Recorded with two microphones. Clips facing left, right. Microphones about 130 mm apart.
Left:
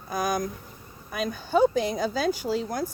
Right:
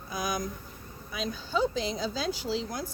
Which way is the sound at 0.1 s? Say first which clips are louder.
Left 5 dB; 50° left (ahead or behind).